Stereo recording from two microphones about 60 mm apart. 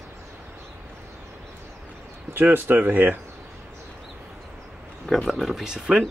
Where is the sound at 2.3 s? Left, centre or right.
Right.